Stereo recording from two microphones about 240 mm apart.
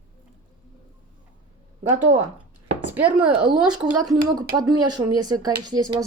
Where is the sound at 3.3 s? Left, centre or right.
Centre.